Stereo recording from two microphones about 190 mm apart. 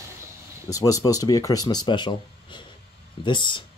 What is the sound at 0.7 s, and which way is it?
Speech, 20° left (ahead or behind).